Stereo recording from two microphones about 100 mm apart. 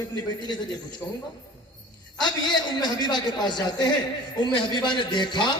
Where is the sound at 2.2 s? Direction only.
45° left (ahead or behind).